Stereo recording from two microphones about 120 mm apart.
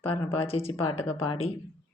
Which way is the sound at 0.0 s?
50° left (ahead or behind).